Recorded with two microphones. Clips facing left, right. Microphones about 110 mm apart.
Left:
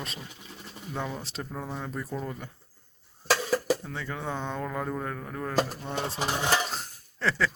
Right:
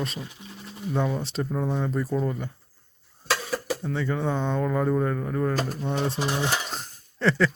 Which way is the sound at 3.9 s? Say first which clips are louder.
Right 8 dB; centre (ahead or behind).